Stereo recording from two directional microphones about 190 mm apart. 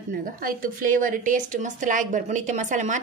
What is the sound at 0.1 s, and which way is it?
A woman's voice, 50° right (ahead or behind).